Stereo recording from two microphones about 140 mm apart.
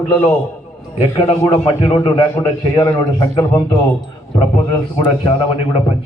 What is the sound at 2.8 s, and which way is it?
Speech, 20° left (ahead or behind).